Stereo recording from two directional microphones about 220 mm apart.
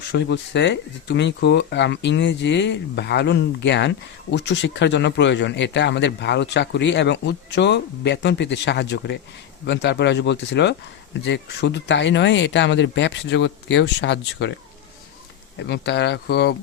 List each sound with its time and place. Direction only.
0.1 s speech: 50° left (ahead or behind)
15.5 s speech: 50° left (ahead or behind)